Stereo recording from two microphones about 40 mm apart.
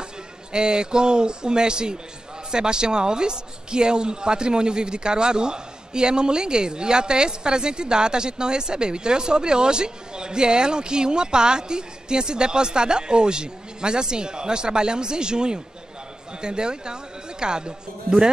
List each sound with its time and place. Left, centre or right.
0.5 s speech: right